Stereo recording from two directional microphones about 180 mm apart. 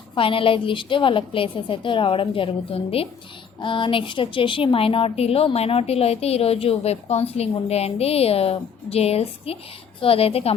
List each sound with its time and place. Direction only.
0.2 s a woman's voice: 30° left (ahead or behind)